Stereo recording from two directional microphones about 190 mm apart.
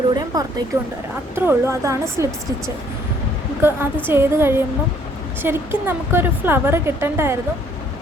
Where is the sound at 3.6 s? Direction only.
10° right (ahead or behind).